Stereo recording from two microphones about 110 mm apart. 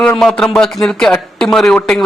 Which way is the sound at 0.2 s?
5° left (ahead or behind).